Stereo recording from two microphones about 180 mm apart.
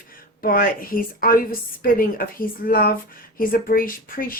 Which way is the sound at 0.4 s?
55° left (ahead or behind).